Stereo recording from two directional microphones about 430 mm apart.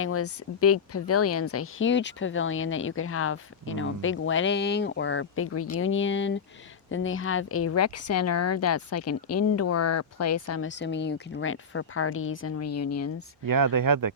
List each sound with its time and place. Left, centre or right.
0.0 s speech: left
13.4 s speech: right